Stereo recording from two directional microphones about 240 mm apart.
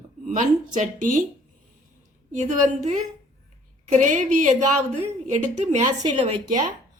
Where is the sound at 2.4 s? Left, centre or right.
Right.